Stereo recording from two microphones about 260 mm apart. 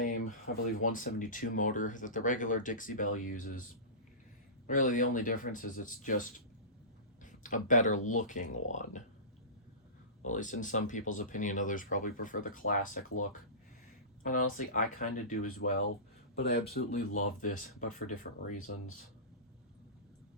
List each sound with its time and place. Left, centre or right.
0.8 s speech: left
4.6 s speech: left
7.3 s speech: left
10.2 s speech: left
14.3 s speech: left